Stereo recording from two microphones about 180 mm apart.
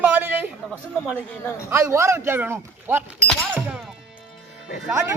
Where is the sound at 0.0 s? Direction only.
10° right (ahead or behind).